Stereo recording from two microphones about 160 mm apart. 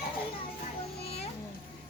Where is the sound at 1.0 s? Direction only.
35° left (ahead or behind).